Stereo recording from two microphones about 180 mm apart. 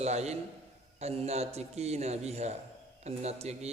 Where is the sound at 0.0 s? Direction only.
35° right (ahead or behind).